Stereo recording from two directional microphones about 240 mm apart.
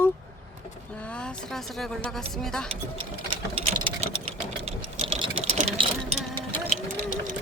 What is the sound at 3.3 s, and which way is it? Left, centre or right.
Sewing machine, right.